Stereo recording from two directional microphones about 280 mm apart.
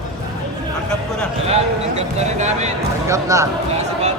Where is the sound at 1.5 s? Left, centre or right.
Right.